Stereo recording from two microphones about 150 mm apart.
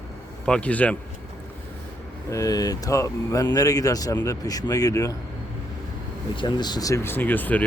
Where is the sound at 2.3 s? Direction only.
20° left (ahead or behind).